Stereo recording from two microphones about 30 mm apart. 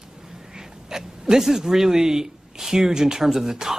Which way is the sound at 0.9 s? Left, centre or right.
Centre.